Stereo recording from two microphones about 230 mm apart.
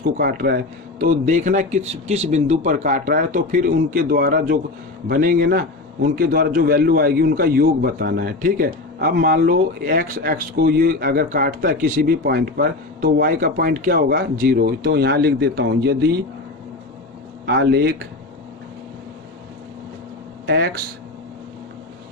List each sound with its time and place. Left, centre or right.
0.2 s speech: right
17.4 s speech: right
20.5 s speech: right